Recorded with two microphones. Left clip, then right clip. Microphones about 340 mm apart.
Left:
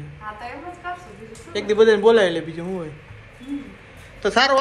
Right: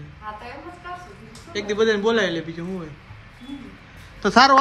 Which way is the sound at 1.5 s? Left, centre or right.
Centre.